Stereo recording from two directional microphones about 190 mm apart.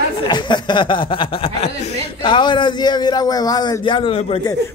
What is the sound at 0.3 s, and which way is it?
Speech, 25° left (ahead or behind).